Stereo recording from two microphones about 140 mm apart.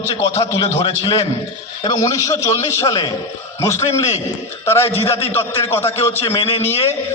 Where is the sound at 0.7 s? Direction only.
40° left (ahead or behind).